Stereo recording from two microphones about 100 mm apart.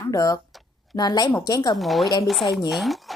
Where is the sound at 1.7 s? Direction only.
Centre (ahead or behind).